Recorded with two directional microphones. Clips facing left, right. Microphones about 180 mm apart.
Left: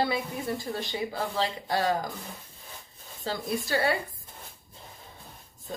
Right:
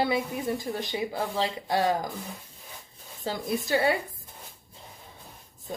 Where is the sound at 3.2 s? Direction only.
20° right (ahead or behind).